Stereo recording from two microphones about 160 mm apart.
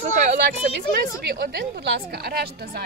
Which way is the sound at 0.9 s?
85° right.